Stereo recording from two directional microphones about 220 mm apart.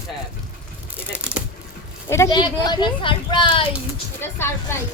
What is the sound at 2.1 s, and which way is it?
Speech, 15° left (ahead or behind).